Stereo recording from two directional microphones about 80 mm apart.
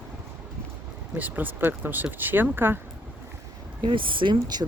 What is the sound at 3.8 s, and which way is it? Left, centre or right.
Speech, right.